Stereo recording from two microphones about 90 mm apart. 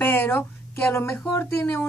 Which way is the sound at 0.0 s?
20° left (ahead or behind).